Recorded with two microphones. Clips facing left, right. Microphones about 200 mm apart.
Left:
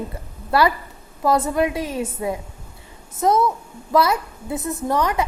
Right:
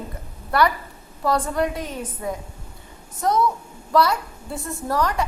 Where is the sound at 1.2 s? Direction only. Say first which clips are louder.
Left 3 dB; 20° left (ahead or behind).